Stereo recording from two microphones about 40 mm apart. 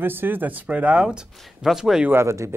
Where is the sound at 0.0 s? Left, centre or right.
Right.